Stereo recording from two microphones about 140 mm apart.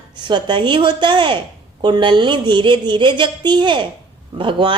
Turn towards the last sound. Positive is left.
turn(degrees=-35)  # may be behind; listen again after turning